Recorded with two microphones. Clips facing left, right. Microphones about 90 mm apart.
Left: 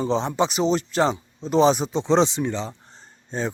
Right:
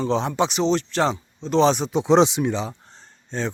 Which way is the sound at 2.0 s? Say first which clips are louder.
Right 5 dB; 15° right (ahead or behind).